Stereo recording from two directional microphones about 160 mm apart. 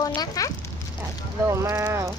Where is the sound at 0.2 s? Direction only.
20° left (ahead or behind).